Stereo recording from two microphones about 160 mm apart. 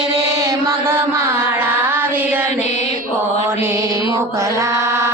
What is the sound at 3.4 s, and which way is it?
Mantra, 15° right (ahead or behind).